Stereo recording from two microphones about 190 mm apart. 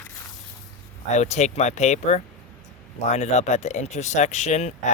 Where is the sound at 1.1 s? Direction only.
35° left (ahead or behind).